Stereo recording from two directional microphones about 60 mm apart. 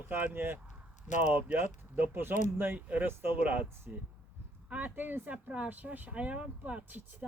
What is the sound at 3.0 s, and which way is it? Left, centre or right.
Speech, right.